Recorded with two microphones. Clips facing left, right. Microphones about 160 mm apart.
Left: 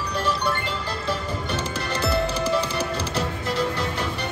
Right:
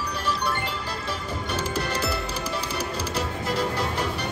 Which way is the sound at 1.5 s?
30° left (ahead or behind).